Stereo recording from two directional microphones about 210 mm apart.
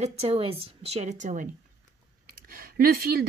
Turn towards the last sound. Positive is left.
turn(degrees=-45)  # may be behind; listen again after turning